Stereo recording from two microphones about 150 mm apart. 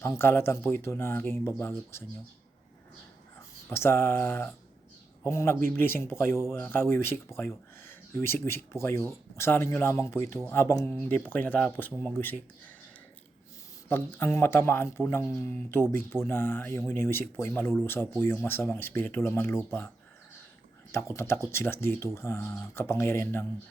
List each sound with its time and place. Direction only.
0.0 s speech: 15° left (ahead or behind)
3.7 s speech: 15° left (ahead or behind)
13.8 s speech: 15° left (ahead or behind)
20.9 s speech: 20° left (ahead or behind)